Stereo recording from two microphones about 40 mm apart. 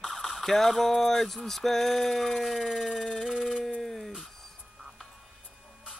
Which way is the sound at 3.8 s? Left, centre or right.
Centre.